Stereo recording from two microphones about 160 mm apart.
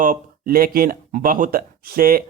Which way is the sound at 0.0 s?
60° right (ahead or behind).